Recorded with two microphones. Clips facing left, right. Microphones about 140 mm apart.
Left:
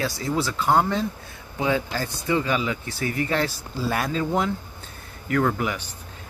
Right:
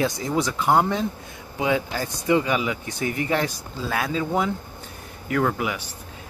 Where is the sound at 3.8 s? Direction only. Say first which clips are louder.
Left 1 dB; 5° left (ahead or behind).